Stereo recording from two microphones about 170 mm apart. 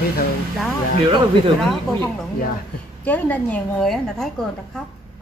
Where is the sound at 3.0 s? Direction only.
10° left (ahead or behind).